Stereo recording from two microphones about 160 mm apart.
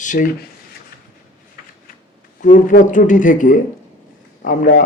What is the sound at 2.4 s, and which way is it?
Speech, 55° left (ahead or behind).